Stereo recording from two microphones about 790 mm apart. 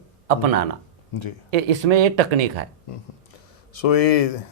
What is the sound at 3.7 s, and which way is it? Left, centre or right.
Speech, left.